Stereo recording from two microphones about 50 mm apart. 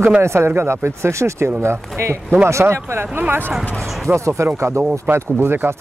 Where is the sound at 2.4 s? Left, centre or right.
Right.